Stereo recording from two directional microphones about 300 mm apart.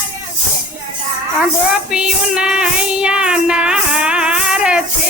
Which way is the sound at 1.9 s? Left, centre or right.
Centre.